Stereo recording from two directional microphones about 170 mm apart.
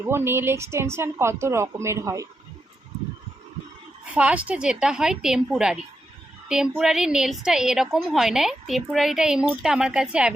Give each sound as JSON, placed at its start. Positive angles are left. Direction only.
{"t": 0.0, "sound": "a woman's voice", "side_deg": -15}
{"t": 4.1, "sound": "a woman's voice", "side_deg": -10}